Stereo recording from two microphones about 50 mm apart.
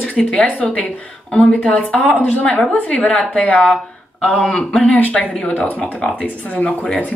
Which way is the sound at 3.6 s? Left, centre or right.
Centre.